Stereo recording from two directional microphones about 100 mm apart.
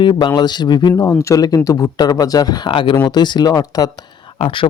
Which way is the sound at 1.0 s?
30° left (ahead or behind).